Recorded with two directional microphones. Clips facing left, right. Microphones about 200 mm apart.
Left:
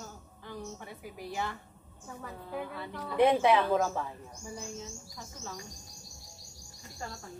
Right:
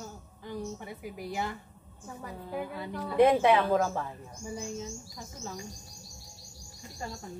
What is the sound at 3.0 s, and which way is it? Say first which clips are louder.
Speech: right 2 dB; centre (ahead or behind).